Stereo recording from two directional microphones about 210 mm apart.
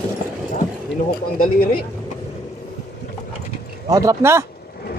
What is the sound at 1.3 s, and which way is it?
Speech, 45° left (ahead or behind).